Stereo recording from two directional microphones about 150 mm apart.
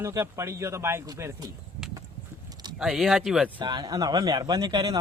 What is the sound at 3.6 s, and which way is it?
A man's voice, 30° right (ahead or behind).